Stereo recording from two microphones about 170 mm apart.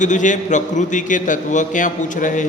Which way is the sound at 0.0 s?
45° left (ahead or behind).